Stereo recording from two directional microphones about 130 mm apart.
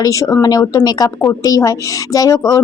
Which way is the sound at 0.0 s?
25° left (ahead or behind).